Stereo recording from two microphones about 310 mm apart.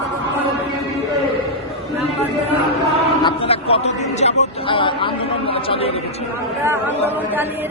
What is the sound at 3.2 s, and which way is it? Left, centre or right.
A man's voice, centre.